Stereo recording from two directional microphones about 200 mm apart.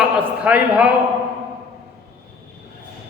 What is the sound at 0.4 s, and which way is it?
Speech, 5° right (ahead or behind).